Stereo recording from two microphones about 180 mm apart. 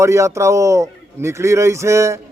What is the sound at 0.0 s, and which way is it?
Speech, 15° right (ahead or behind).